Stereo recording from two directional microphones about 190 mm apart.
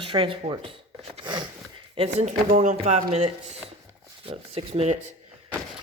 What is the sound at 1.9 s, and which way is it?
Speech, 35° right (ahead or behind).